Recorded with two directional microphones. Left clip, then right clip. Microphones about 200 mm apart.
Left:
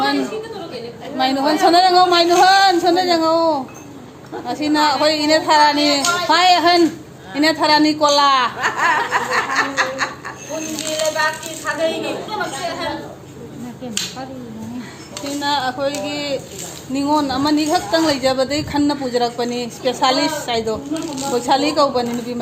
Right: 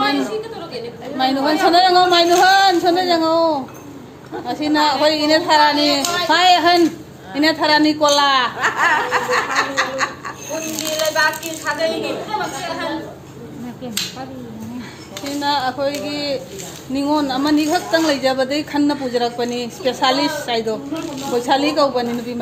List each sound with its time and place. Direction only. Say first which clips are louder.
1.1 s a woman's voice: even; 10° left (ahead or behind)
8.5 s snicker: right 1 dB; 5° right (ahead or behind)
10.9 s ratchet: right 2 dB; 25° right (ahead or behind)
15.4 s a woman's voice: right 1 dB; 10° left (ahead or behind)